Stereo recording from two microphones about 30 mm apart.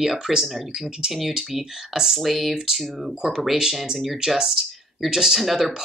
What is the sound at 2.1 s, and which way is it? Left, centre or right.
Speech, centre.